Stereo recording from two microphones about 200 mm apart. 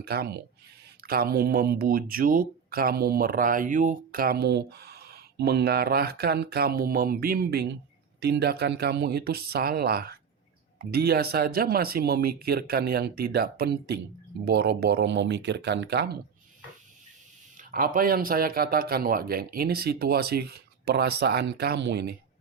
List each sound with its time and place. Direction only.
0.0 s speech: 50° right (ahead or behind)
17.6 s speech: 45° right (ahead or behind)